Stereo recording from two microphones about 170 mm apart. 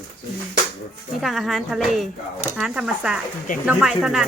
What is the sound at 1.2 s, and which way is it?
Speech, centre (ahead or behind).